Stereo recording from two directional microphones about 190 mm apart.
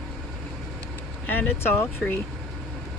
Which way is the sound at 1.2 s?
10° left (ahead or behind).